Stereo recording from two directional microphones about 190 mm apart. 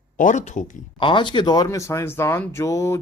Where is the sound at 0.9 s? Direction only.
25° left (ahead or behind).